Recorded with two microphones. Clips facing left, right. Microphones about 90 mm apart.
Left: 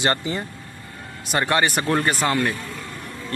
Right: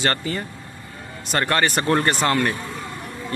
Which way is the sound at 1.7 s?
Centre (ahead or behind).